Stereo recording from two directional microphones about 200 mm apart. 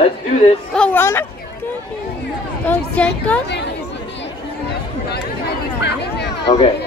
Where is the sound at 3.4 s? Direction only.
60° left (ahead or behind).